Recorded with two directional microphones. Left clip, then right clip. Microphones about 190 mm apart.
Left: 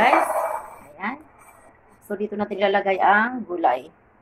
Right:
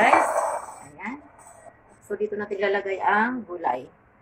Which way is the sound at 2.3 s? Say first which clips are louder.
Left 6 dB; 35° left (ahead or behind).